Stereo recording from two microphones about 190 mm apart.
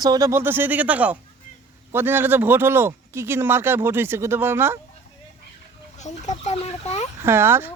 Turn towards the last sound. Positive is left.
turn(degrees=-10)  # may be behind; listen again after turning